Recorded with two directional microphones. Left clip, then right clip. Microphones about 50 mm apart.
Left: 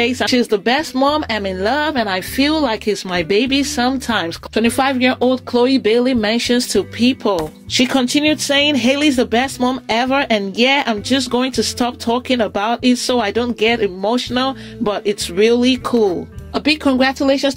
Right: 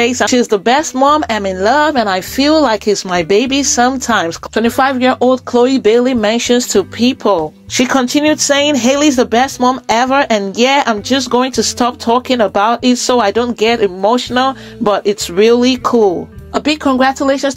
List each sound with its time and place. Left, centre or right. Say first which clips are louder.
0.0 s speech: right 5 dB; right
0.3 s speech: right 4 dB; right
1.4 s speech: right 6 dB; right
4.6 s speech: right 3 dB; centre
5.5 s speech: right 3 dB; right
7.1 s speech: right 5 dB; centre; by 11.0 s right
11.1 s speech: right 4 dB; centre
12.3 s speech: right 5 dB; right
15.8 s speech: right 5 dB; right
16.5 s speech: right 2 dB; centre
17.2 s speech: right 2 dB; left